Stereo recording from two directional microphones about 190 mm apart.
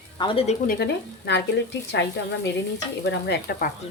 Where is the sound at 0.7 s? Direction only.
60° left (ahead or behind).